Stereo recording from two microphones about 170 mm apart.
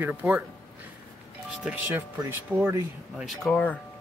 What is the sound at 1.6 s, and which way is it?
Speech, 10° right (ahead or behind).